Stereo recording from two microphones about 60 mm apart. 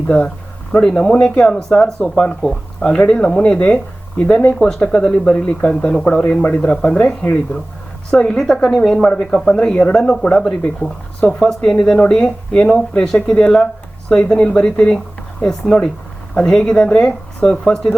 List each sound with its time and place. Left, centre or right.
0.7 s speech: centre
8.1 s speech: centre